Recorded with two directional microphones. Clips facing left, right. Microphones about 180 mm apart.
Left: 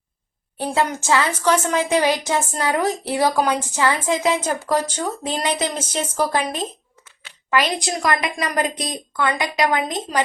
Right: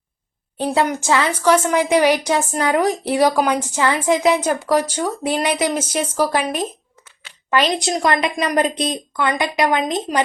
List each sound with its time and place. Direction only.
0.5 s a woman's voice: 15° right (ahead or behind)
8.0 s a woman's voice: 25° right (ahead or behind)